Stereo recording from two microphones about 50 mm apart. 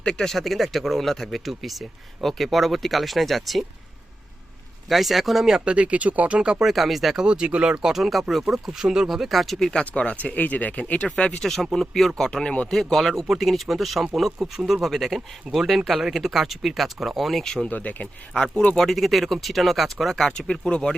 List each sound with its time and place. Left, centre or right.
0.0 s speech: centre
4.9 s speech: centre
5.5 s speech: right
6.6 s speech: centre
7.3 s speech: centre
7.9 s speech: centre
9.8 s speech: left
11.3 s speech: centre
12.7 s speech: centre
17.4 s speech: centre
17.7 s speech: left
18.3 s speech: centre
20.5 s speech: centre